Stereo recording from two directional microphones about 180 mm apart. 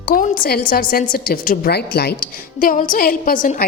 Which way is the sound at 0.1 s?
55° left (ahead or behind).